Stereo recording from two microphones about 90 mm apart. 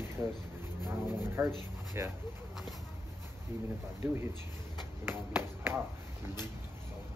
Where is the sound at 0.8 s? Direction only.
25° right (ahead or behind).